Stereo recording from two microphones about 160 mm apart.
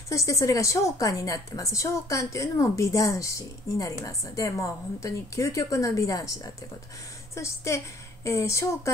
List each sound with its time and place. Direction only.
0.1 s a woman's voice: 20° left (ahead or behind)